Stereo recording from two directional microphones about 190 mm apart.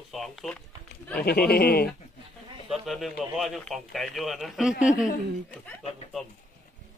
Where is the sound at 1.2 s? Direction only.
55° left (ahead or behind).